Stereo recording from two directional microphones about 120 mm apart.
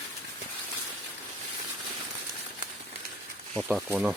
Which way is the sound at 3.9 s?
10° right (ahead or behind).